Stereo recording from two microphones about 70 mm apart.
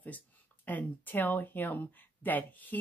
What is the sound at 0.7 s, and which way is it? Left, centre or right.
Speech, left.